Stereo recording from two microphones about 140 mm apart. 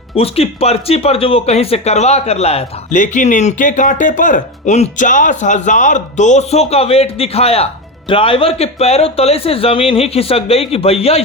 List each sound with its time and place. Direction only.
0.2 s speech: 45° left (ahead or behind)
3.0 s speech: 65° left (ahead or behind); by 11.2 s 45° left (ahead or behind)